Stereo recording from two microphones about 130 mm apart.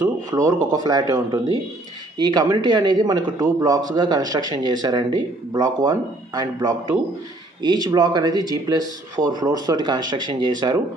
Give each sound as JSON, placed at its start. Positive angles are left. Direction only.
{"t": 0.3, "sound": "speech", "side_deg": -25}